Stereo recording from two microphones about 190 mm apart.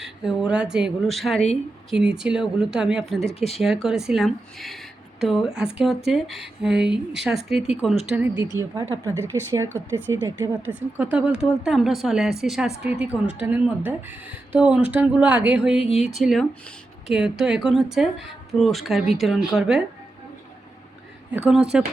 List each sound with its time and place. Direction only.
0.0 s a woman's voice: 5° right (ahead or behind)
15.8 s speech: 30° left (ahead or behind)
16.0 s a woman's voice: centre (ahead or behind)
21.7 s a woman's voice: 5° right (ahead or behind)